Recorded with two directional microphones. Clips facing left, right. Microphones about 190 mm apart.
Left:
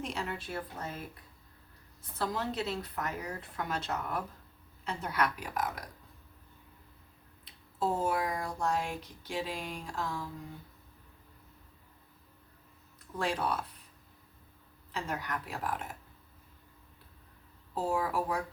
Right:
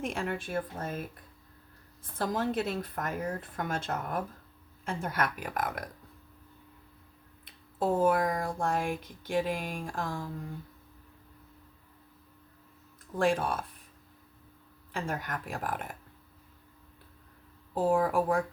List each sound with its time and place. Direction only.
0.0 s speech: 50° right (ahead or behind)
2.1 s speech: 50° right (ahead or behind)
7.4 s speech: 55° right (ahead or behind)
13.1 s speech: 50° right (ahead or behind)
14.9 s speech: 50° right (ahead or behind)
17.7 s speech: 50° right (ahead or behind)